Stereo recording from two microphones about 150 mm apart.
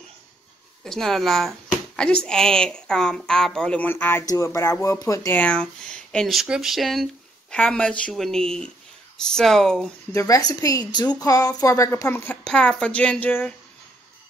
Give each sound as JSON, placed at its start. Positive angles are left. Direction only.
{"t": 0.8, "sound": "a woman's voice", "side_deg": 0}
{"t": 5.4, "sound": "speech", "side_deg": 5}
{"t": 10.1, "sound": "a woman's voice", "side_deg": 25}